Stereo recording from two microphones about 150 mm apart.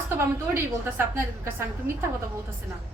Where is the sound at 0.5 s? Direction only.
15° right (ahead or behind).